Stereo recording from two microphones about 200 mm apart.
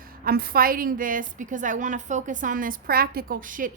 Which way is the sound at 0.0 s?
45° right (ahead or behind).